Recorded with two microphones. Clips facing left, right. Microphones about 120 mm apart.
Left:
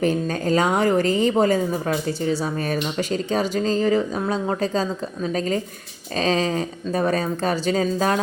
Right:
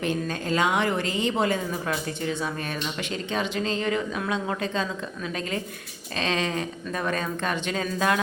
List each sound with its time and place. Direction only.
0.0 s speech: 40° left (ahead or behind)